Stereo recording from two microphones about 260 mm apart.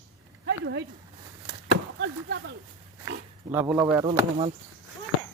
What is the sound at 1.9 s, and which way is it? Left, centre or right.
Speech, right.